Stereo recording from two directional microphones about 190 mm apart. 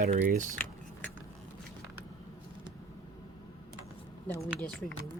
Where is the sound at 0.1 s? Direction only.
45° right (ahead or behind).